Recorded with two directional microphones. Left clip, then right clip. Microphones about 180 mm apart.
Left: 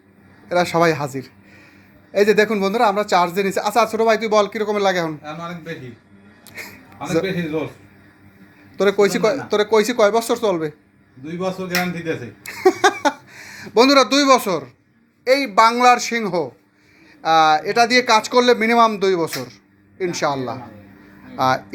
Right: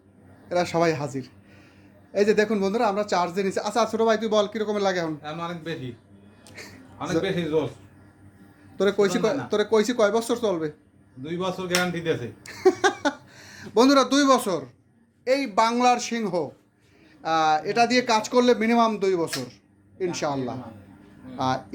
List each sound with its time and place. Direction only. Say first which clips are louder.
0.4 s speech: left 6 dB; 5° left (ahead or behind)
5.2 s a man's voice: left 2 dB; 40° right (ahead or behind)
6.6 s a sound: left 4 dB; 10° left (ahead or behind)
8.7 s speech: left 6 dB; 10° left (ahead or behind)
11.3 s a man's voice: left 4 dB; 40° right (ahead or behind)
12.4 s a sound: left 6 dB; 10° left (ahead or behind)
15.2 s speech: left 8 dB; 10° left (ahead or behind)